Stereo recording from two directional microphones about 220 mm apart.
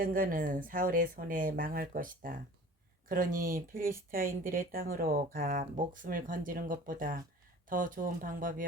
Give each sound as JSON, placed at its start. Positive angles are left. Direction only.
{"t": 0.0, "sound": "speech", "side_deg": -40}